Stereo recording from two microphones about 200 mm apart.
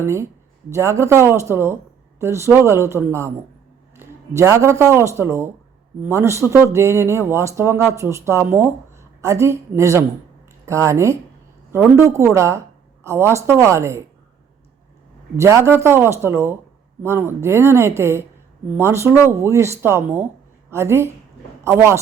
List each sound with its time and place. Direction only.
0.0 s a woman's voice: 15° right (ahead or behind)
15.4 s a woman's voice: 15° right (ahead or behind)